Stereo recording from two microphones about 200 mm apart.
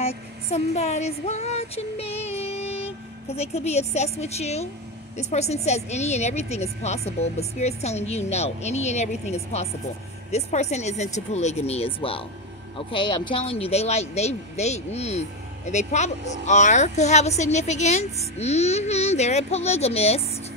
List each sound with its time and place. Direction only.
0.0 s speech: 30° left (ahead or behind)